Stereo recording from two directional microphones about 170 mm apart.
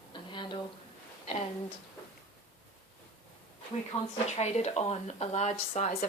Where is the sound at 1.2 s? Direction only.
40° left (ahead or behind).